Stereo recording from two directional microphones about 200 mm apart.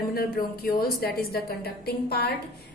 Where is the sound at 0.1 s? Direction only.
50° left (ahead or behind).